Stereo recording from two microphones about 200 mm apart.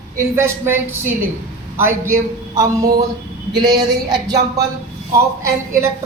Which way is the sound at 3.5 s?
20° right (ahead or behind).